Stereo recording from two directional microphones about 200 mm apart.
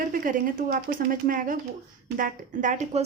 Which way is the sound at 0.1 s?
45° right (ahead or behind).